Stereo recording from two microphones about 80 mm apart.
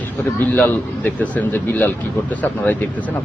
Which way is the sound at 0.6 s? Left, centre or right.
Left.